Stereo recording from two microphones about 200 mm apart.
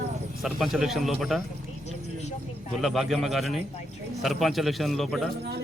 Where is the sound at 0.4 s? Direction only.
Centre (ahead or behind).